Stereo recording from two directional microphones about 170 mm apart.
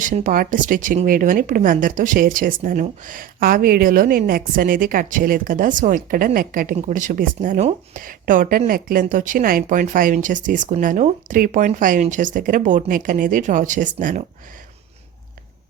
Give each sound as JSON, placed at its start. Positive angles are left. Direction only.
{"t": 0.0, "sound": "speech", "side_deg": -50}